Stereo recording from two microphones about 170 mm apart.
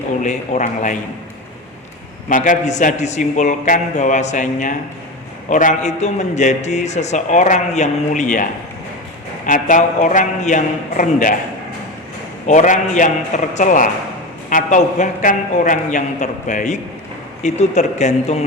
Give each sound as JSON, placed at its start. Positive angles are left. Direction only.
{"t": 0.2, "sound": "a man's voice", "side_deg": 45}
{"t": 2.3, "sound": "a man's voice", "side_deg": 50}
{"t": 9.5, "sound": "a man's voice", "side_deg": 50}
{"t": 12.5, "sound": "a man's voice", "side_deg": 45}